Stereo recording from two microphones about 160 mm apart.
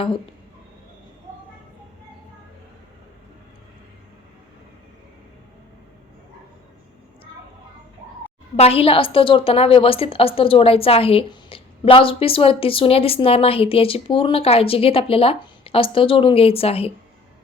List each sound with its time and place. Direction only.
8.5 s a woman's voice: 40° left (ahead or behind)